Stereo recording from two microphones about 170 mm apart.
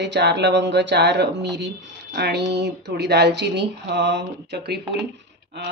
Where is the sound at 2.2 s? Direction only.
80° right.